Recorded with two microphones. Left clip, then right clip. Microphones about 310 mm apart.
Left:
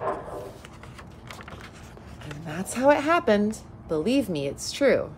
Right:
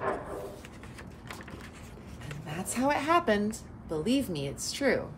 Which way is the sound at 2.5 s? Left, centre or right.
Left.